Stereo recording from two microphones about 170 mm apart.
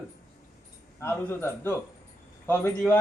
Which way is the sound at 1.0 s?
15° left (ahead or behind).